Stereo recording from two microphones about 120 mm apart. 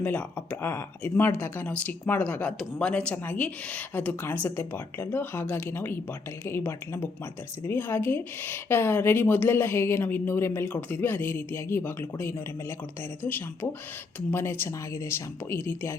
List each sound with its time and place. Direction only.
0.0 s a woman's voice: 15° left (ahead or behind)